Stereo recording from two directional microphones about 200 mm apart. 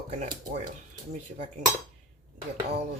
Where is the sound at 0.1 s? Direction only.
35° right (ahead or behind).